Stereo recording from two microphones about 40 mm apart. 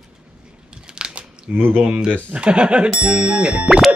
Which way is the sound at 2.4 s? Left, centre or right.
Right.